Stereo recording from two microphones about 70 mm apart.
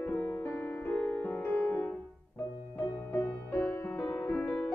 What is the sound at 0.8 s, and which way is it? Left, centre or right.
Music, left.